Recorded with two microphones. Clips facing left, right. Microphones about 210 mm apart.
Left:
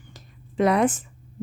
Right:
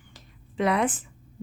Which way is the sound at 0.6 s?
45° left (ahead or behind).